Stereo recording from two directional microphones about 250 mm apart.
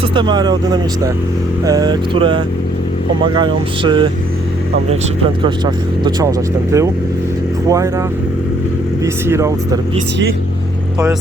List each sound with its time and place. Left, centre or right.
0.1 s speech: centre
3.3 s vehicle: centre
5.4 s speech: centre
9.2 s speech: centre